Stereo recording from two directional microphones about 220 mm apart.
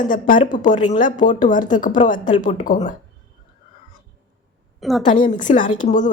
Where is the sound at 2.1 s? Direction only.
20° left (ahead or behind).